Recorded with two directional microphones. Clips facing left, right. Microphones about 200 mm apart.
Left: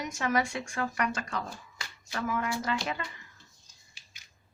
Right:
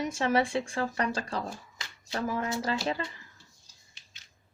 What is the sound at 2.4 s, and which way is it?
Speech, 20° right (ahead or behind).